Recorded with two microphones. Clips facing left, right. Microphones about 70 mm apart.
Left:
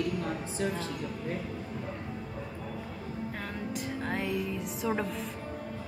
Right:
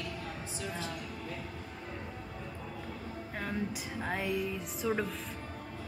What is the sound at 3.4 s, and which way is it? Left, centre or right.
Music, centre.